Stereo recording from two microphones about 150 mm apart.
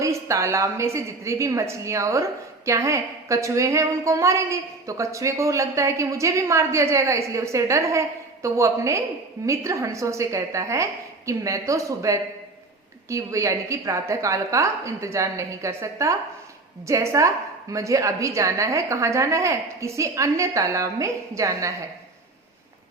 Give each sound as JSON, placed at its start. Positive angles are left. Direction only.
{"t": 0.0, "sound": "a woman's voice", "side_deg": -20}